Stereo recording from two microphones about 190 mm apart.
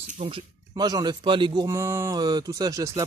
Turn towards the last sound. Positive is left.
turn(degrees=-20)  # may be behind; listen again after turning